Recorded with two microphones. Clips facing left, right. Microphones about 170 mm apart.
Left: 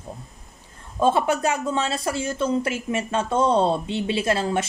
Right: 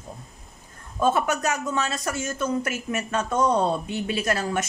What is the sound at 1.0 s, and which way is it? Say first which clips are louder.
Speech: left 3 dB; 30° left (ahead or behind).